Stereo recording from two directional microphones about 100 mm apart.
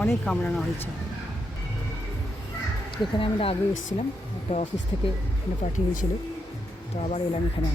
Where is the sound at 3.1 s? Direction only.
65° left (ahead or behind).